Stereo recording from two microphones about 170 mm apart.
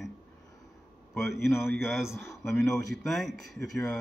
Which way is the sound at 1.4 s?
15° left (ahead or behind).